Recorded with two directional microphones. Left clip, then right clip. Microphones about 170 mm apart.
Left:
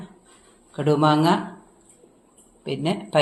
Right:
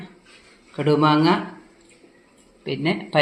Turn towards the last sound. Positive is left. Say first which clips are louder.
# right 1 dB
turn(degrees=0)  # may be behind; listen again after turning